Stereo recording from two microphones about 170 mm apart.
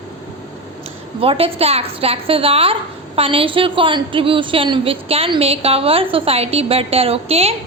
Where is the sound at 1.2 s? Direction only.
35° right (ahead or behind).